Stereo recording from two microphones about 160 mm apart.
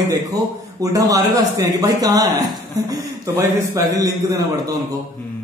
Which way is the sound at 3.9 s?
20° right (ahead or behind).